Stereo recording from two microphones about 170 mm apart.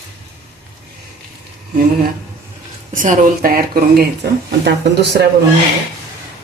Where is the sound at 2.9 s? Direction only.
50° right (ahead or behind); by 5.3 s 75° right (ahead or behind).